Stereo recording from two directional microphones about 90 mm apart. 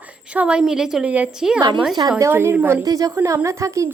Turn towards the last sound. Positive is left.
turn(degrees=-35)  # may be behind; listen again after turning